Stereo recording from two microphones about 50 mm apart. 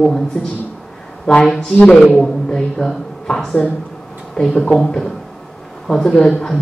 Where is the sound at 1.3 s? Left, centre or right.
Centre.